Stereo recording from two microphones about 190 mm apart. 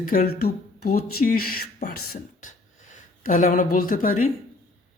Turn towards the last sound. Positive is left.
turn(degrees=45)  # may be behind; listen again after turning